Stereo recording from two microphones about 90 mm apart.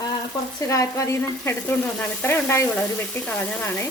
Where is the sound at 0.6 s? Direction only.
35° left (ahead or behind).